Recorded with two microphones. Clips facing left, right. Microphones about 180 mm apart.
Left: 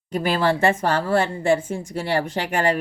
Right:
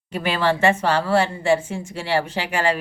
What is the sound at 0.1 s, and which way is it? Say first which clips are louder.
A woman's voice: left 1 dB; 40° left (ahead or behind).